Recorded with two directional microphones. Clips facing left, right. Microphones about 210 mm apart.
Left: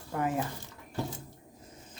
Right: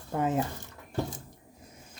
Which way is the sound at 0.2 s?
25° right (ahead or behind).